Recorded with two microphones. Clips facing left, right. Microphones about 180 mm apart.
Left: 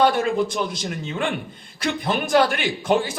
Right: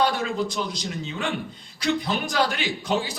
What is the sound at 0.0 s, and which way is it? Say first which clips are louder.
A man's voice: left 5 dB; 55° left (ahead or behind).